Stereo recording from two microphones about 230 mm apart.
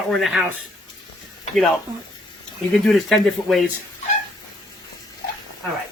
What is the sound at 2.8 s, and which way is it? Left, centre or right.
Speech, centre.